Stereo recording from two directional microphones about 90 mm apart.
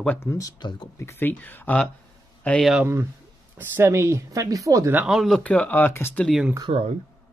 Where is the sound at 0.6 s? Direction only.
55° left (ahead or behind).